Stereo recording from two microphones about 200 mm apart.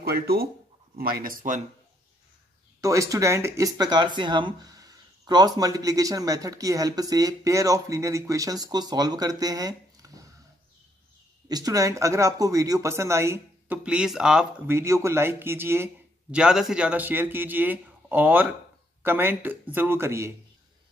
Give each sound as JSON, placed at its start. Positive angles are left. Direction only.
{"t": 0.0, "sound": "speech", "side_deg": -50}
{"t": 2.8, "sound": "speech", "side_deg": -15}
{"t": 11.4, "sound": "speech", "side_deg": -20}